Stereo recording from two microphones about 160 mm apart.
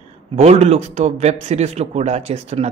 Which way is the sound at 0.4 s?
40° right (ahead or behind).